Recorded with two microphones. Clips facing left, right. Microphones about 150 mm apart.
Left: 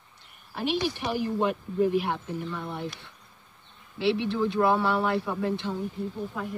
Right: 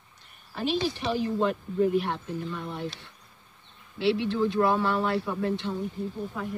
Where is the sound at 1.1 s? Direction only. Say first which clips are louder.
Even; 10° left (ahead or behind).